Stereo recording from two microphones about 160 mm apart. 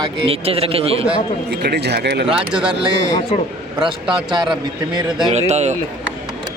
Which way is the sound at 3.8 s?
30° right (ahead or behind).